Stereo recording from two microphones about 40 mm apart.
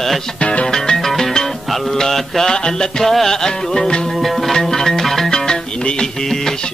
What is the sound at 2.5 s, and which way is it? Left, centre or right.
Music, left.